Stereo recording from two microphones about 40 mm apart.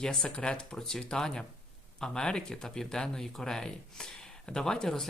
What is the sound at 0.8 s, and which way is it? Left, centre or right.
Speech, centre.